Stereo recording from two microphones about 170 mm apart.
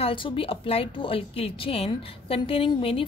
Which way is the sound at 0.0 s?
30° left (ahead or behind).